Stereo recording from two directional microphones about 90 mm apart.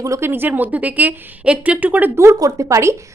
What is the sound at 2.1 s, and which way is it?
Speech, 35° right (ahead or behind).